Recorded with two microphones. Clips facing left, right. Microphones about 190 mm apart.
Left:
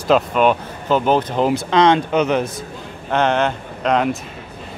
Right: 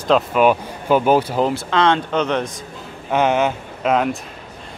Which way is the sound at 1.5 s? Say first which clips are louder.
Left 3 dB; 15° left (ahead or behind).